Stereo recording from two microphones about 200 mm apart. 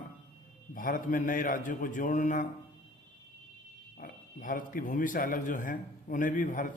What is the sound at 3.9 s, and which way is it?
A man's voice, 45° left (ahead or behind).